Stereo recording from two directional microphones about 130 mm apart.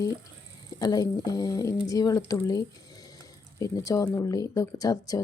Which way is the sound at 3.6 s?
25° left (ahead or behind).